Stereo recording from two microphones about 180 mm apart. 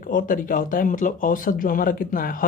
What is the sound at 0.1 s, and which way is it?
Speech, 50° left (ahead or behind).